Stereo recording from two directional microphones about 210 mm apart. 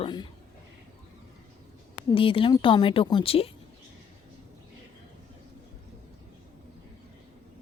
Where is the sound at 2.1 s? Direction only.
25° left (ahead or behind).